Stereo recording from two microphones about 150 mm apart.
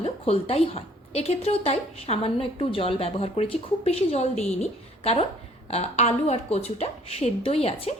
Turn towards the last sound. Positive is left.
turn(degrees=45)  # may be behind; listen again after turning